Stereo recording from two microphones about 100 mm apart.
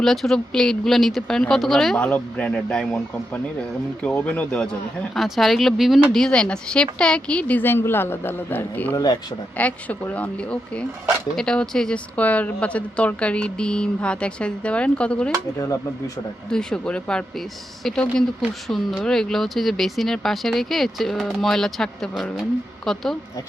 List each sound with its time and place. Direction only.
0.0 s speech: 5° left (ahead or behind)
2.0 s speech: 15° left (ahead or behind)
5.1 s speech: centre (ahead or behind)
15.5 s speech: 35° left (ahead or behind)
16.5 s speech: 5° left (ahead or behind)